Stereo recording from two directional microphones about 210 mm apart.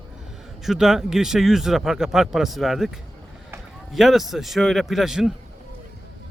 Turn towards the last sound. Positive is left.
turn(degrees=0)  # may be behind; listen again after turning